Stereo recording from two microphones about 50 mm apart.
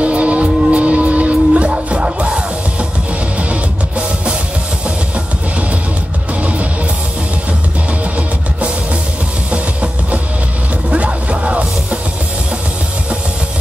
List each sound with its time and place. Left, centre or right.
0.0 s music: right
9.5 s music: right